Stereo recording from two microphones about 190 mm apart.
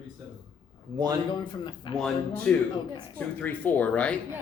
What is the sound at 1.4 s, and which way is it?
Speech, 25° left (ahead or behind).